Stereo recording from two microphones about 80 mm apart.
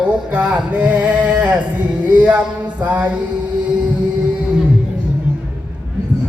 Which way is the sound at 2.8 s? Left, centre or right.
Centre.